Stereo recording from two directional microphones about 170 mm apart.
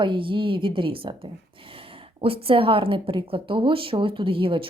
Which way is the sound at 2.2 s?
35° right (ahead or behind).